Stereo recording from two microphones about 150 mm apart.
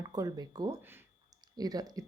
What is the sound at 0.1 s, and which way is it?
Speech, 25° right (ahead or behind).